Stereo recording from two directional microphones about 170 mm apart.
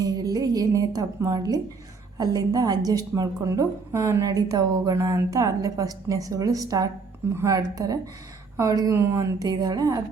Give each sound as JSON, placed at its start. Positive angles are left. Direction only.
{"t": 0.0, "sound": "a woman's voice", "side_deg": -20}